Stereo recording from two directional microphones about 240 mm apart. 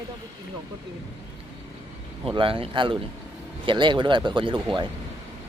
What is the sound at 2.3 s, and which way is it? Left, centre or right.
Speech, right.